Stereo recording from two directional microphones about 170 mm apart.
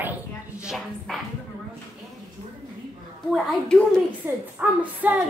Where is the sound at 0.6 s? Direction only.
Centre (ahead or behind).